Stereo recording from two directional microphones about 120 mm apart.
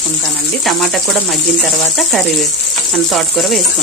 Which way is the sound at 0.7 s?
Centre (ahead or behind).